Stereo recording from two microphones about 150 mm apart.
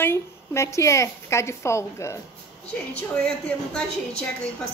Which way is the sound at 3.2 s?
5° left (ahead or behind).